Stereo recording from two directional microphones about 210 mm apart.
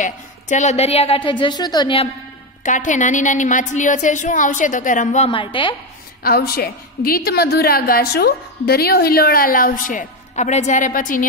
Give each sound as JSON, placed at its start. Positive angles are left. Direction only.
{"t": 0.0, "sound": "a woman's voice", "side_deg": 35}
{"t": 2.6, "sound": "a woman's voice", "side_deg": 35}
{"t": 6.2, "sound": "a woman's voice", "side_deg": 45}